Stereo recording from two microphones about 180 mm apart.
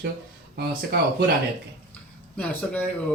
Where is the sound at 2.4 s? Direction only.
10° left (ahead or behind).